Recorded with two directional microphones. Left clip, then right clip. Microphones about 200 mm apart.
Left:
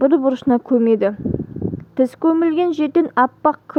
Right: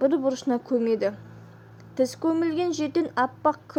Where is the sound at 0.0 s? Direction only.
40° left (ahead or behind).